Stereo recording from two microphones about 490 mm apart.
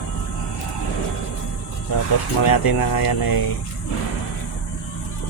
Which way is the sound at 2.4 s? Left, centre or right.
Left.